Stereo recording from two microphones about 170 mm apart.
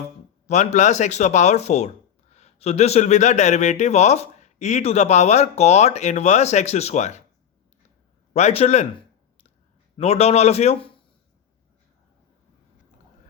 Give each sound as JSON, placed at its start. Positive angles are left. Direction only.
{"t": 0.4, "sound": "a man's voice", "side_deg": 45}
{"t": 8.3, "sound": "a man's voice", "side_deg": 40}
{"t": 10.0, "sound": "a man's voice", "side_deg": 40}